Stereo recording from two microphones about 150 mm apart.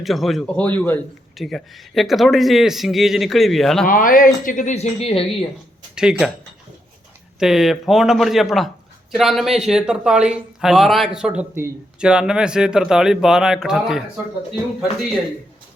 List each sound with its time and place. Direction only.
0.0 s speech: centre (ahead or behind)
1.4 s speech: centre (ahead or behind)
3.8 s speech: 65° left (ahead or behind)
4.4 s speech: 55° left (ahead or behind); by 5.5 s 40° left (ahead or behind)
5.9 s speech: 5° right (ahead or behind)
7.3 s speech: centre (ahead or behind)